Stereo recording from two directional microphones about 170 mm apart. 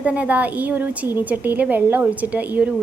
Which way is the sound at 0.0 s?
10° right (ahead or behind).